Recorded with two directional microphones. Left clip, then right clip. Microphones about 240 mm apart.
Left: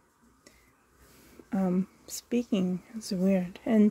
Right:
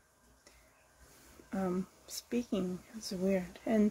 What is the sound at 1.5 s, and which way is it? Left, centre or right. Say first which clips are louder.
Speech: left 5 dB; left.